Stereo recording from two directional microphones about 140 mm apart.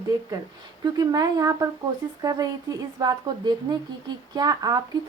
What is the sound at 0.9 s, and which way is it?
A woman's voice, 25° right (ahead or behind).